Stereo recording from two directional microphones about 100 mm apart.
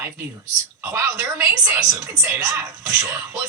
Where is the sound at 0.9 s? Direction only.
20° right (ahead or behind).